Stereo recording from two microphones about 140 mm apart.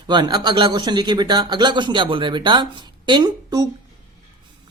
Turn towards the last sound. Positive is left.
turn(degrees=-30)  # may be behind; listen again after turning